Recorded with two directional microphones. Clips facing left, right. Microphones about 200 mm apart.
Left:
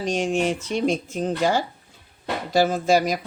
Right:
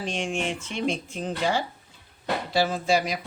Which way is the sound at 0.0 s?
40° left (ahead or behind).